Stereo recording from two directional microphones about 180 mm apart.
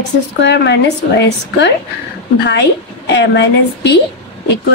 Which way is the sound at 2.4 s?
70° left (ahead or behind).